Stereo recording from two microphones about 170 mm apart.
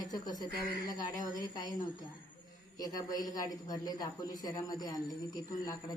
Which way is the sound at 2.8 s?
20° left (ahead or behind).